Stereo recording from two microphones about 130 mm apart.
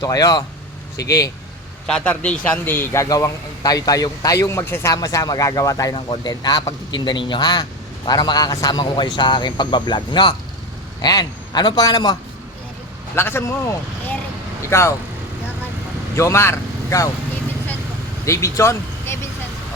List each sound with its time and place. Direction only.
0.0 s a man's voice: 30° left (ahead or behind)
1.9 s a man's voice: 10° left (ahead or behind); by 12.1 s 30° left (ahead or behind)
13.1 s speech: 20° left (ahead or behind)
14.7 s a man's voice: 20° left (ahead or behind)
16.1 s speech: 20° left (ahead or behind)
18.3 s speech: 25° left (ahead or behind)